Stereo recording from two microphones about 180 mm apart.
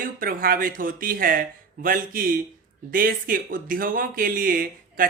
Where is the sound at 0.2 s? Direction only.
50° right (ahead or behind).